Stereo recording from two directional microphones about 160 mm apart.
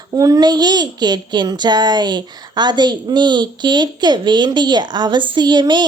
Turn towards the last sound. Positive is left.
turn(degrees=-30)  # may be behind; listen again after turning